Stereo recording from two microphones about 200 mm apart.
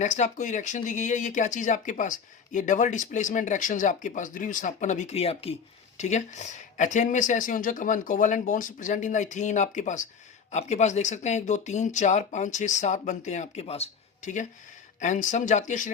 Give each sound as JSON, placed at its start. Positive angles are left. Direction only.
{"t": 0.0, "sound": "speech", "side_deg": 35}